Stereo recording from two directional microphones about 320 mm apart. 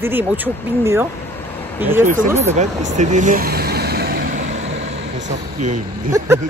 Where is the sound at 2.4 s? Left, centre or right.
Right.